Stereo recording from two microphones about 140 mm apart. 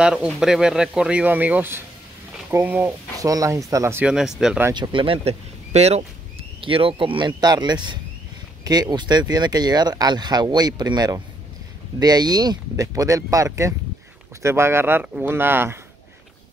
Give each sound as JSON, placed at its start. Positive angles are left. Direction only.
{"t": 0.0, "sound": "speech", "side_deg": -5}
{"t": 3.2, "sound": "speech", "side_deg": -25}
{"t": 4.0, "sound": "speech", "side_deg": -5}
{"t": 4.7, "sound": "speech", "side_deg": -35}